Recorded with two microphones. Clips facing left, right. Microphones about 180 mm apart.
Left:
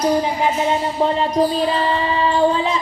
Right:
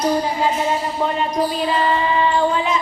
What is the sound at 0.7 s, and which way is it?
Music, 30° left (ahead or behind).